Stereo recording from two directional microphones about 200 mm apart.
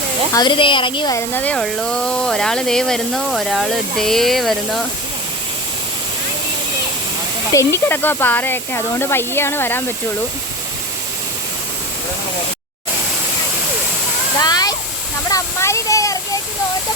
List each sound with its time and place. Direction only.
0.3 s speech: 25° left (ahead or behind)
1.3 s speech: 10° left (ahead or behind)
7.5 s speech: 15° left (ahead or behind)
14.3 s a sound: 20° left (ahead or behind)